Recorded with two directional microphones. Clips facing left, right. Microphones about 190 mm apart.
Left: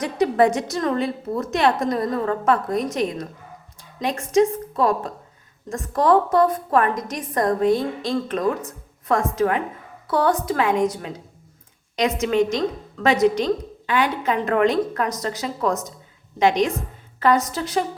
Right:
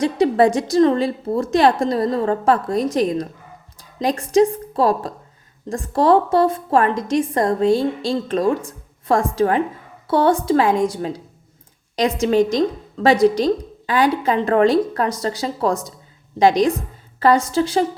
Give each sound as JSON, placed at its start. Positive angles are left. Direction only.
{"t": 0.0, "sound": "a woman's voice", "side_deg": -30}